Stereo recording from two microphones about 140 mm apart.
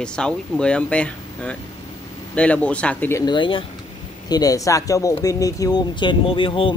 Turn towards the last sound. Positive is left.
turn(degrees=40)  # may be behind; listen again after turning